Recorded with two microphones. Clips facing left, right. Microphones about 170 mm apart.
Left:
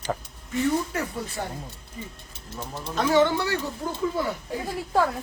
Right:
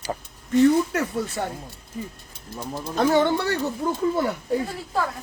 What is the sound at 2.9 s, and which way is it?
Speech, 50° right (ahead or behind).